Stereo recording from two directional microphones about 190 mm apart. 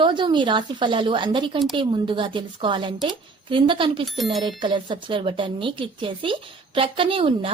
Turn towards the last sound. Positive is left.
turn(degrees=-30)  # may be behind; listen again after turning